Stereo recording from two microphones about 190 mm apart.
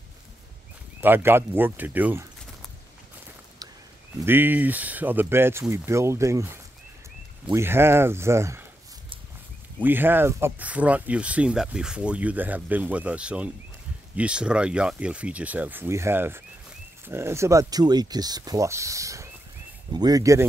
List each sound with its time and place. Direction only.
1.0 s speech: 10° right (ahead or behind)
4.3 s speech: 10° right (ahead or behind)
9.8 s speech: 10° right (ahead or behind)